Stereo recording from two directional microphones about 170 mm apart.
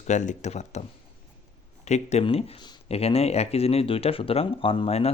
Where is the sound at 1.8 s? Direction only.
40° left (ahead or behind).